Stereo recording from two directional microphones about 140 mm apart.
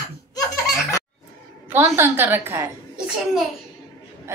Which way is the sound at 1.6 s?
15° right (ahead or behind).